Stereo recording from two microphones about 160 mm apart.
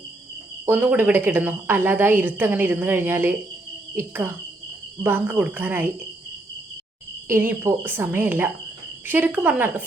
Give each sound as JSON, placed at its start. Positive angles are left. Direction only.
{"t": 0.6, "sound": "a woman's voice", "side_deg": -10}
{"t": 7.3, "sound": "a woman's voice", "side_deg": -15}